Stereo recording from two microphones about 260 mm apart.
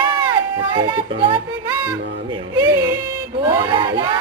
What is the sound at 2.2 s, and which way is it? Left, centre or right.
Speech, centre.